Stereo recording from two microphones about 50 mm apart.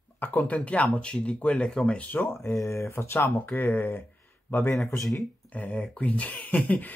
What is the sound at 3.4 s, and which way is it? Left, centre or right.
Speech, left.